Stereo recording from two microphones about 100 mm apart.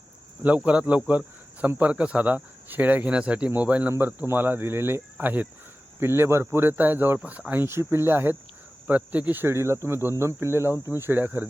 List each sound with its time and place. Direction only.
0.4 s speech: 15° right (ahead or behind)